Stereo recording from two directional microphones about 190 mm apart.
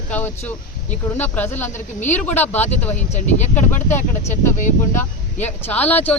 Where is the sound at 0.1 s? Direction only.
10° left (ahead or behind).